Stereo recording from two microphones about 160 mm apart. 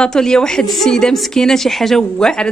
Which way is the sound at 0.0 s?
5° left (ahead or behind).